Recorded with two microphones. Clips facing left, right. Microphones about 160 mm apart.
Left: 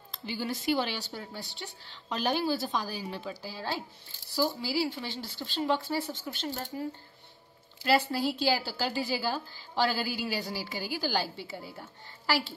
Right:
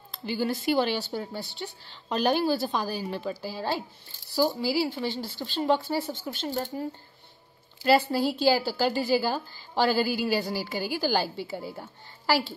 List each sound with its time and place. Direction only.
0.5 s a woman's voice: 45° right (ahead or behind)
1.4 s a woman's voice: 55° right (ahead or behind)
7.8 s a woman's voice: 45° right (ahead or behind)